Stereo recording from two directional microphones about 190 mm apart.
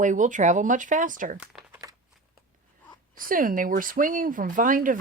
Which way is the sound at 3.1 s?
45° right (ahead or behind).